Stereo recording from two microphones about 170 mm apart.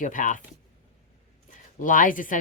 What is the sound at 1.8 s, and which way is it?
Speech, 50° left (ahead or behind).